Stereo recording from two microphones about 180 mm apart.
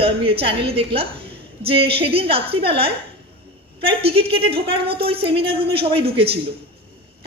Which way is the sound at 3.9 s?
30° right (ahead or behind).